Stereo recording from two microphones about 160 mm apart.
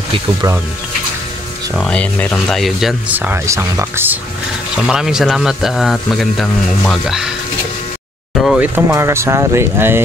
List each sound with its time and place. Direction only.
1.8 s speech: 5° left (ahead or behind)
3.1 s speech: 10° right (ahead or behind)
4.8 s speech: 5° right (ahead or behind)
8.4 s speech: centre (ahead or behind)
8.7 s speech: 15° right (ahead or behind)